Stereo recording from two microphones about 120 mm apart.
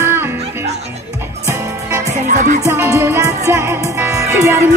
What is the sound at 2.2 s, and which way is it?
Speech, 90° right.